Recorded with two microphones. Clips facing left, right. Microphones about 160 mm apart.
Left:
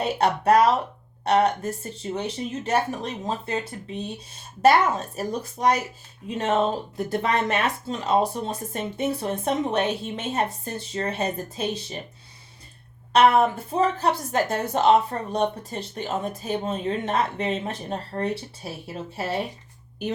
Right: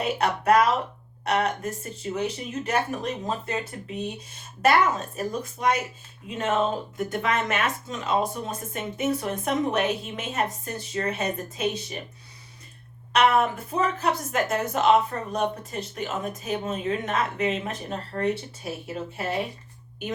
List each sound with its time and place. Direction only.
0.0 s speech: 30° left (ahead or behind)
5.1 s speech: 35° left (ahead or behind)
13.1 s speech: 30° left (ahead or behind)